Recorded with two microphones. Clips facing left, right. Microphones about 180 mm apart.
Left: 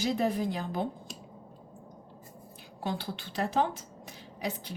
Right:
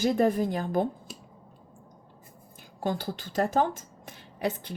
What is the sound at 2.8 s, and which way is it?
A woman's voice, 45° right (ahead or behind).